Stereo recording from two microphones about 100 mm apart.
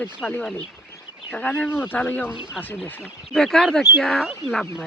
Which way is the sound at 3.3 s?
5° left (ahead or behind).